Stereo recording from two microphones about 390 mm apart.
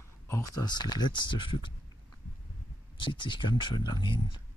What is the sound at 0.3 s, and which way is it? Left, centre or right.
Speech, centre.